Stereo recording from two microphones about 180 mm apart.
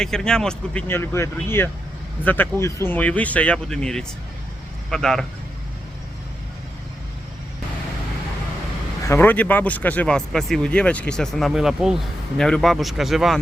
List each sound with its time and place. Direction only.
0.0 s speech: 5° left (ahead or behind)
9.0 s speech: 10° left (ahead or behind)